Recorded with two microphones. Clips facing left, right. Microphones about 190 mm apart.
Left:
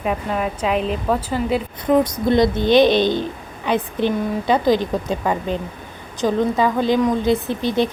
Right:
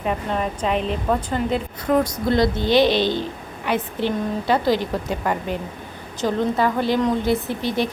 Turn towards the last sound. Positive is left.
turn(degrees=20)  # may be behind; listen again after turning